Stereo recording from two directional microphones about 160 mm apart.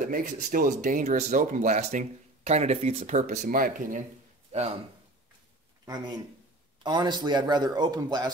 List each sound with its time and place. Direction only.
0.0 s speech: 55° right (ahead or behind)
4.5 s speech: 40° right (ahead or behind)
6.8 s a man's voice: 30° right (ahead or behind)